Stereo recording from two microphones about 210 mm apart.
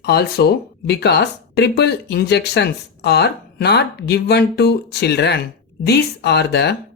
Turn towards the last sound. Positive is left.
turn(degrees=50)  # may be behind; listen again after turning